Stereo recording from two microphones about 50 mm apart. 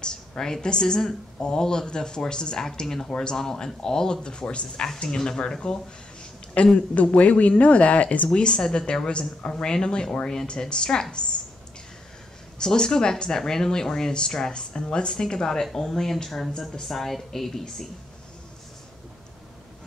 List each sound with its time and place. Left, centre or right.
0.0 s a woman's voice: centre
8.3 s a woman's voice: centre
12.5 s a woman's voice: centre